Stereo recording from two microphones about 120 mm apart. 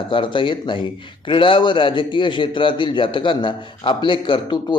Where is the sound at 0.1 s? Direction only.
45° left (ahead or behind).